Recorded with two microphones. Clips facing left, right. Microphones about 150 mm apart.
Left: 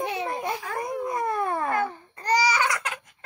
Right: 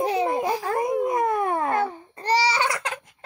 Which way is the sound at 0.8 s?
20° right (ahead or behind).